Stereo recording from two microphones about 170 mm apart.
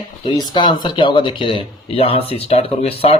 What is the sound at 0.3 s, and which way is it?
Speech, 25° left (ahead or behind).